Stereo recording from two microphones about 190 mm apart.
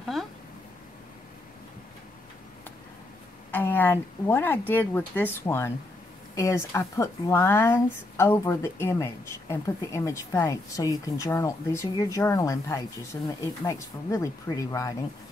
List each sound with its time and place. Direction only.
3.5 s speech: 10° left (ahead or behind)